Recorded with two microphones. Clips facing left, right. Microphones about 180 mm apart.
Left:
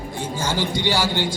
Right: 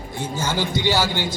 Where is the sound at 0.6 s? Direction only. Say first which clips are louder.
Right 1 dB; 10° right (ahead or behind).